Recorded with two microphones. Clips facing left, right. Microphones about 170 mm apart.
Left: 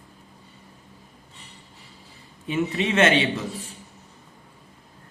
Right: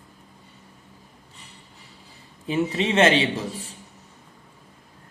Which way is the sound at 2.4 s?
30° right (ahead or behind).